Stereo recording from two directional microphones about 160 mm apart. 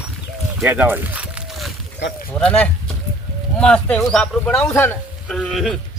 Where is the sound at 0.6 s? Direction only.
10° right (ahead or behind).